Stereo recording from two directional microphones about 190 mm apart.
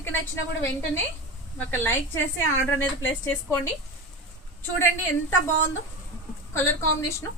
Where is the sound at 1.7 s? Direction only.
15° left (ahead or behind).